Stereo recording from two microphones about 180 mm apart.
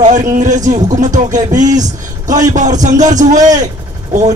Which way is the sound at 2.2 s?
45° right (ahead or behind).